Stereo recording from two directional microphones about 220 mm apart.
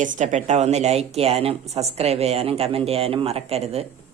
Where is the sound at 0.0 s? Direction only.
35° right (ahead or behind).